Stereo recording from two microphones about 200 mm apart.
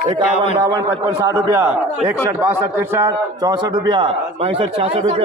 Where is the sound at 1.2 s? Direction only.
15° right (ahead or behind).